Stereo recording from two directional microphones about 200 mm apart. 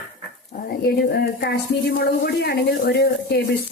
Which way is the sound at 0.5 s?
50° left (ahead or behind).